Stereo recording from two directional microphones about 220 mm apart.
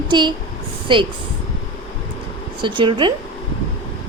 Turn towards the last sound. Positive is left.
turn(degrees=-20)  # may be behind; listen again after turning